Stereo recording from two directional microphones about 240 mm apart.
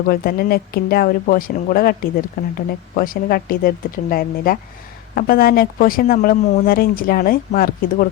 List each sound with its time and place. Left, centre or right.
0.1 s speech: left